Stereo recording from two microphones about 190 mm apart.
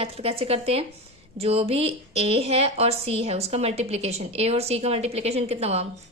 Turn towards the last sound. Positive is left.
turn(degrees=-35)  # may be behind; listen again after turning